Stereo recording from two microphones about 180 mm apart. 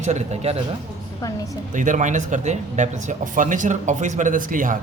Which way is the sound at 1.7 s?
45° right (ahead or behind).